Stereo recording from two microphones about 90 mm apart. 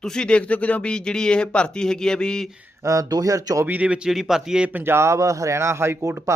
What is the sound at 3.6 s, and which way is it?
Speech, 15° right (ahead or behind).